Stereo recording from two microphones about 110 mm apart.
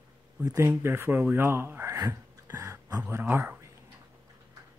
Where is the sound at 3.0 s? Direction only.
20° right (ahead or behind).